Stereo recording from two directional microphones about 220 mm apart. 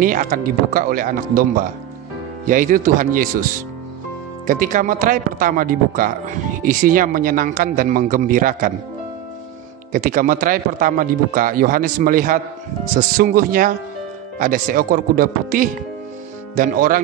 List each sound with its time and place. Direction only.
0.0 s speech: 35° right (ahead or behind)
4.5 s speech: 35° right (ahead or behind)
9.9 s speech: 40° right (ahead or behind)